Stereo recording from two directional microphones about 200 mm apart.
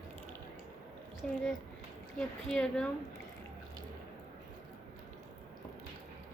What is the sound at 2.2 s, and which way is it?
Speech, 5° left (ahead or behind).